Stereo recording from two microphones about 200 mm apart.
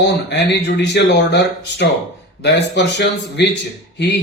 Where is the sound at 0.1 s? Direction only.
60° left (ahead or behind).